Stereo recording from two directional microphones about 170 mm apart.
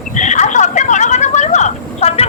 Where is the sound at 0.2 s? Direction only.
45° left (ahead or behind).